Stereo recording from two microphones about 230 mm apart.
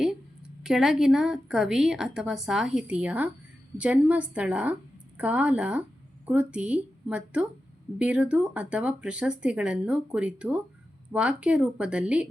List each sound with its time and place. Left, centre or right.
0.0 s a woman's voice: centre